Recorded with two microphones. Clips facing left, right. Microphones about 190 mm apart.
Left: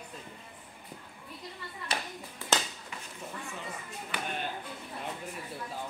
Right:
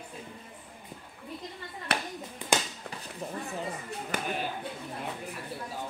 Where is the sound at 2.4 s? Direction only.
20° right (ahead or behind).